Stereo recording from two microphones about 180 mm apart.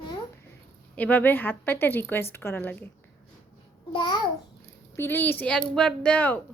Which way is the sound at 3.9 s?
25° left (ahead or behind).